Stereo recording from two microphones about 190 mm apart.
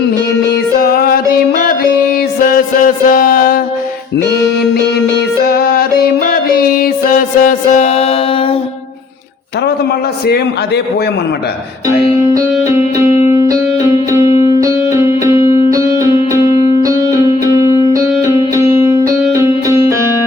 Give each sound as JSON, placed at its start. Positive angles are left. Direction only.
{"t": 0.5, "sound": "music", "side_deg": 50}
{"t": 5.5, "sound": "music", "side_deg": 55}
{"t": 13.5, "sound": "music", "side_deg": -15}
{"t": 18.3, "sound": "music", "side_deg": -15}